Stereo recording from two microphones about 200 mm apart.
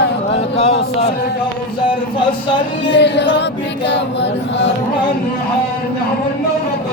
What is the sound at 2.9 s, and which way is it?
Choir, 60° left (ahead or behind).